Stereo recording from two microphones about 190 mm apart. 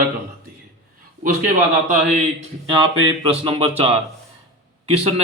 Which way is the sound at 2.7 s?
25° right (ahead or behind).